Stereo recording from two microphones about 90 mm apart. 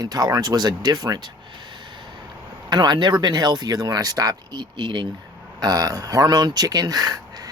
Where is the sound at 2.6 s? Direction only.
55° right (ahead or behind).